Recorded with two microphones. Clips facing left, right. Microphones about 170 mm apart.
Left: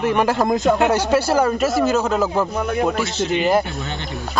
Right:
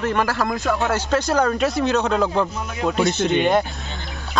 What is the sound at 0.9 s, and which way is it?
Speech, 5° left (ahead or behind).